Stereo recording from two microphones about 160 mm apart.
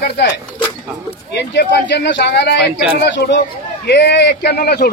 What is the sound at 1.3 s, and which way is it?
A man's voice, 90° left.